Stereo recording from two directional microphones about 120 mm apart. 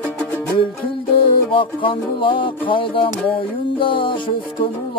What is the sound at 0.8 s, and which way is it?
Music, 45° left (ahead or behind).